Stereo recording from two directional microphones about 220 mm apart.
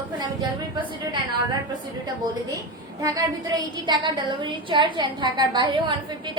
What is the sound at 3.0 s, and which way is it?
A woman's voice, 15° right (ahead or behind).